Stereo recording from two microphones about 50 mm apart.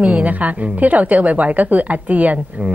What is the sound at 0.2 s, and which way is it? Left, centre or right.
A woman's voice, right.